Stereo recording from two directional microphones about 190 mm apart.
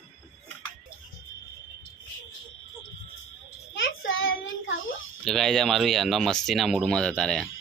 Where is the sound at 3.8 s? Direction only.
90° left.